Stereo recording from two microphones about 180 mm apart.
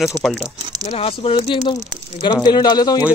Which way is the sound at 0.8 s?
35° left (ahead or behind).